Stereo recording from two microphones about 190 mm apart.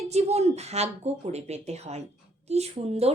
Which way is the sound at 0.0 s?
35° right (ahead or behind).